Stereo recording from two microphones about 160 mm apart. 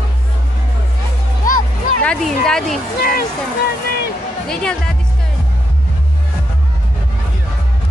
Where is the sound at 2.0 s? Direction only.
5° left (ahead or behind).